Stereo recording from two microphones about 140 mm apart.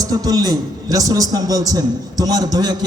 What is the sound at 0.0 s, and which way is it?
A man's voice, 25° right (ahead or behind).